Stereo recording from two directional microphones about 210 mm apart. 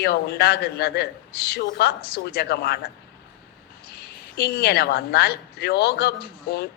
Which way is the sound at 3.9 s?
50° left (ahead or behind).